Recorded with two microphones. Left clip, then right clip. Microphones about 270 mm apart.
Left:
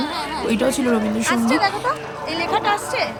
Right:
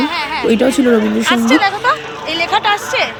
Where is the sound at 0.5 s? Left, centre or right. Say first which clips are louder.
Right 8 dB; centre.